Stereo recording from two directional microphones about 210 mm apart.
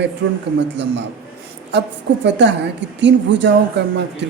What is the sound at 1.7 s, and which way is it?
Speech, 55° right (ahead or behind).